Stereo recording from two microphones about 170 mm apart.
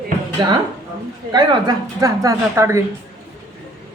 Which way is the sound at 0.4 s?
25° right (ahead or behind).